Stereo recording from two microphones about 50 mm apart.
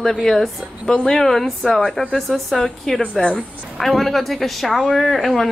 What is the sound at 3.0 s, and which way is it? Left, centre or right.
Speech, left.